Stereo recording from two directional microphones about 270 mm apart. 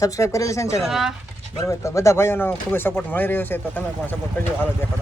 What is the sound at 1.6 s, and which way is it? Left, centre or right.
Speech, centre.